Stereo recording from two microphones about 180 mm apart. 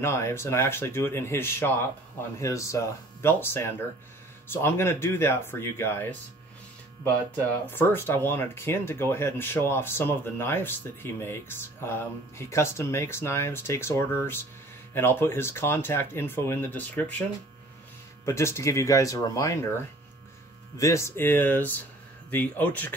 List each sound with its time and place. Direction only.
0.0 s speech: 15° left (ahead or behind)
7.3 s speech: 10° left (ahead or behind)
18.2 s speech: 15° left (ahead or behind)
20.7 s speech: 15° left (ahead or behind)